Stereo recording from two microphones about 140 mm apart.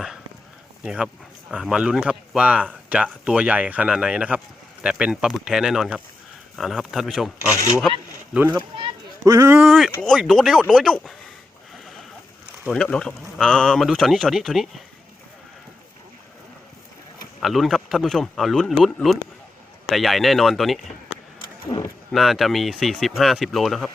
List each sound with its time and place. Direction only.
0.9 s speech: 5° right (ahead or behind)
7.5 s speech: 20° left (ahead or behind)
7.8 s a sound: centre (ahead or behind)
9.2 s speech: 20° right (ahead or behind)
9.6 s speech: centre (ahead or behind)
12.7 s speech: 5° left (ahead or behind)
17.4 s speech: centre (ahead or behind)
21.7 s speech: 20° left (ahead or behind)
22.1 s speech: centre (ahead or behind)